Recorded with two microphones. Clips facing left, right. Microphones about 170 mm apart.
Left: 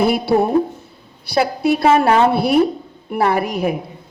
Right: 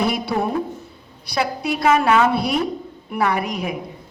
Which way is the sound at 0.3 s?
45° left (ahead or behind).